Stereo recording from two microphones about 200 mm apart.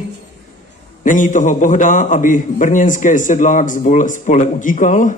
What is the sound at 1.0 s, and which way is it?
A man's voice, 40° left (ahead or behind).